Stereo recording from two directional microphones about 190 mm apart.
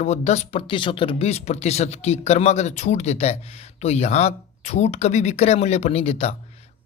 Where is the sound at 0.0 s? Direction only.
35° left (ahead or behind).